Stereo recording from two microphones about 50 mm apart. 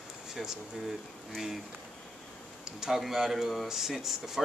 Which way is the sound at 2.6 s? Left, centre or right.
Centre.